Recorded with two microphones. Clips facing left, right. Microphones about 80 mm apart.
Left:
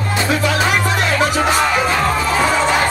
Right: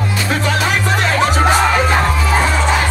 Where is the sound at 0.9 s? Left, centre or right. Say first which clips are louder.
Right 1 dB; right.